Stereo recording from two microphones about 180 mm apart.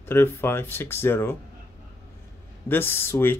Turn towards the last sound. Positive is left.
turn(degrees=10)  # may be behind; listen again after turning